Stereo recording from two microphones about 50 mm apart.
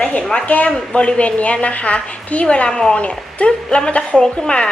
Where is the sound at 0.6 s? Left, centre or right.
Left.